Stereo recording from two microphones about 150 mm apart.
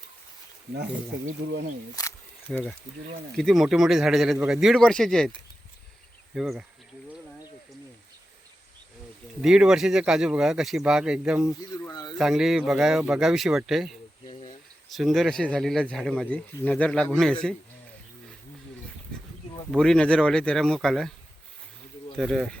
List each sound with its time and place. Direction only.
2.0 s speech: 25° left (ahead or behind)
2.5 s speech: 5° left (ahead or behind)
9.4 s speech: 5° right (ahead or behind)
11.7 s a sound: 25° left (ahead or behind)
12.1 s speech: centre (ahead or behind)
14.9 s speech: centre (ahead or behind)
19.7 s speech: centre (ahead or behind)
22.2 s speech: 5° left (ahead or behind)